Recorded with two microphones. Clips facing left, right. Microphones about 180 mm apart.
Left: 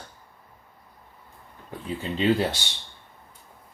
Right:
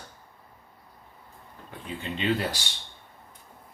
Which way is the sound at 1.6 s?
35° left (ahead or behind).